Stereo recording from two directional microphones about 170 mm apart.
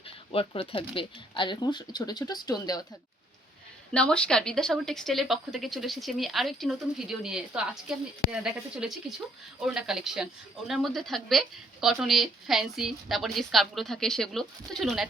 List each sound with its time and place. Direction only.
0.3 s speech: 35° left (ahead or behind)
3.9 s a woman's voice: 5° left (ahead or behind)